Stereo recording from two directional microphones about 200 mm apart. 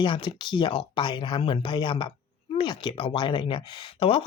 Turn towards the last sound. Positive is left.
turn(degrees=25)  # may be behind; listen again after turning